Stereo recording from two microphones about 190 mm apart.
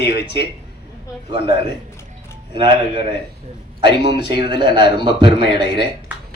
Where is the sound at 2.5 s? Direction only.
25° right (ahead or behind).